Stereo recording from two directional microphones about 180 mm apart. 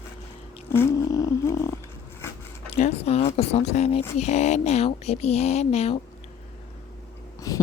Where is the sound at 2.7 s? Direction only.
40° left (ahead or behind).